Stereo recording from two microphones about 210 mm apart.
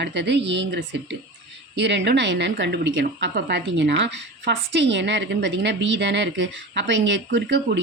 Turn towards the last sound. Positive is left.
turn(degrees=-55)  # may be behind; listen again after turning